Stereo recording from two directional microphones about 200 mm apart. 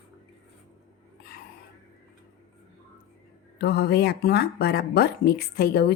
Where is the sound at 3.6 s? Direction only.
55° left (ahead or behind).